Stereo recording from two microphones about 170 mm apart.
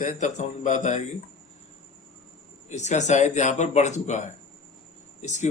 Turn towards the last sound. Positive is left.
turn(degrees=45)  # may be behind; listen again after turning